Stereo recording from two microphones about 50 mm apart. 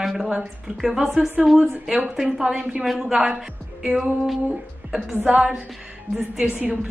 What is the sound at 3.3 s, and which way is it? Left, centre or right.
Speech, centre.